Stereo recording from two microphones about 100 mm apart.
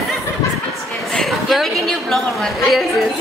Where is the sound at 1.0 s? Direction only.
Centre (ahead or behind).